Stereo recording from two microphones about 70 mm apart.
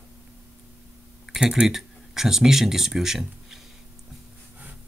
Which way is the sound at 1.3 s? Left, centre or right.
Centre.